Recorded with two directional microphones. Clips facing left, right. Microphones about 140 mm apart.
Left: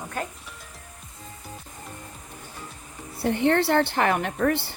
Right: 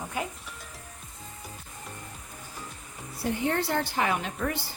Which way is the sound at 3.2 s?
70° left (ahead or behind).